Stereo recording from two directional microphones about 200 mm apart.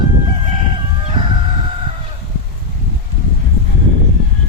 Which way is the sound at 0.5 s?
30° right (ahead or behind).